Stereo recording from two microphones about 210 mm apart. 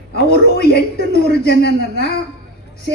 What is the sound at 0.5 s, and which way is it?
A woman's voice, 50° left (ahead or behind).